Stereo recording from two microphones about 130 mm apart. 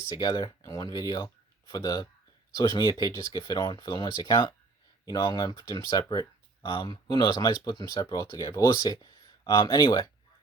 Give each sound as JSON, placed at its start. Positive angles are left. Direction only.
{"t": 0.2, "sound": "speech", "side_deg": 35}